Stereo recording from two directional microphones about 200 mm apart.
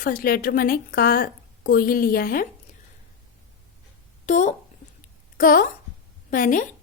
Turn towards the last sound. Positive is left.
turn(degrees=40)  # may be behind; listen again after turning